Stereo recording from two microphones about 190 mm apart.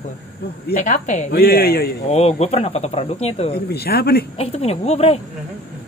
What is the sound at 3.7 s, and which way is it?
Speech, 55° left (ahead or behind).